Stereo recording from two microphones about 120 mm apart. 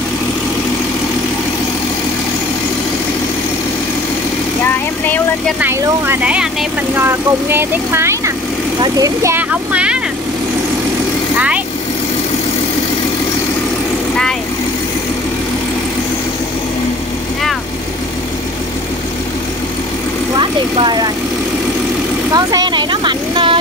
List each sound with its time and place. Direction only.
5.6 s speech: 15° right (ahead or behind)
9.5 s speech: 10° right (ahead or behind)
20.3 s speech: 40° right (ahead or behind)
22.3 s vehicle: 35° right (ahead or behind)